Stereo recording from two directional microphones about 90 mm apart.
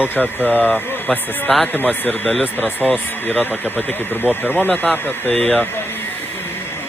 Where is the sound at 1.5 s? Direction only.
Centre (ahead or behind).